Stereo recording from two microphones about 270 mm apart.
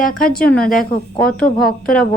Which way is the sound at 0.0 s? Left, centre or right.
Left.